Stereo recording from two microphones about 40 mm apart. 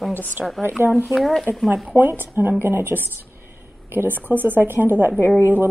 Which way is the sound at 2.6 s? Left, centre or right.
Right.